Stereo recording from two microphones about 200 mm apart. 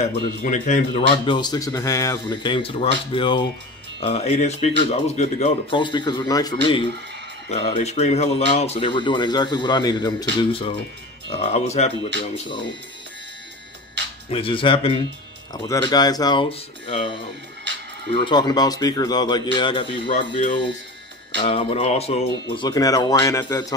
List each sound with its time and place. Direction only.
0.1 s speech: 40° left (ahead or behind)
1.1 s speech: 25° left (ahead or behind)
14.3 s speech: 25° left (ahead or behind)